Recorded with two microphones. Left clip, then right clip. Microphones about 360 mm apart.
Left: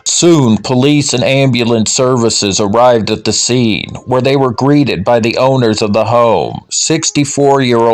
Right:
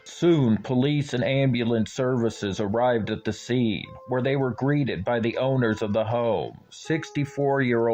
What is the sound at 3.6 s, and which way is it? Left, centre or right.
Speech, right.